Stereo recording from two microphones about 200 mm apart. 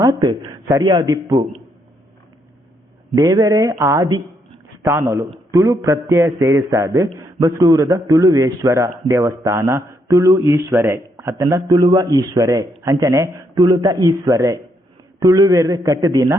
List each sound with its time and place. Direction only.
0.0 s speech: 20° right (ahead or behind)
3.2 s a man's voice: 15° right (ahead or behind)